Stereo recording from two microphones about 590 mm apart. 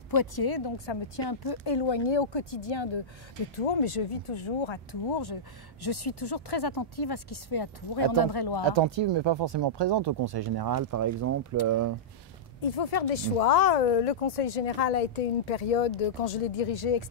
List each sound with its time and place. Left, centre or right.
0.1 s speech: left
3.5 s speech: left
8.6 s speech: right
12.7 s speech: left
16.3 s speech: left